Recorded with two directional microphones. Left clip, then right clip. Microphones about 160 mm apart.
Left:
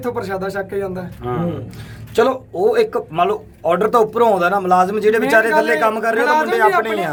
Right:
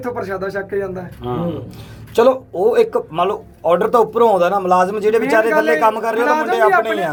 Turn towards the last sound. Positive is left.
turn(degrees=15)  # may be behind; listen again after turning